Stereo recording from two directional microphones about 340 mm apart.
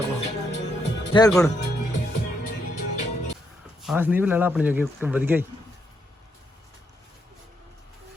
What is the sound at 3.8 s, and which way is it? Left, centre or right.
Speech, centre.